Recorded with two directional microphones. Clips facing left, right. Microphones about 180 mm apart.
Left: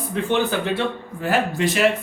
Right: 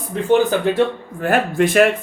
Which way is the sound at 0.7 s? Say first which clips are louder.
Right 6 dB; 50° right (ahead or behind).